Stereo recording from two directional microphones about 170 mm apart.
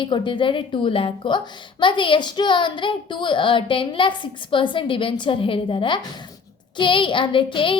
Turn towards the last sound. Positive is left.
turn(degrees=30)  # may be behind; listen again after turning